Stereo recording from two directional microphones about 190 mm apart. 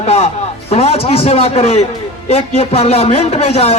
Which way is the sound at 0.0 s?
30° left (ahead or behind).